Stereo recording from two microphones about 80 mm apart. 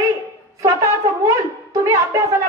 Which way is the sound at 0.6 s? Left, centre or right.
Right.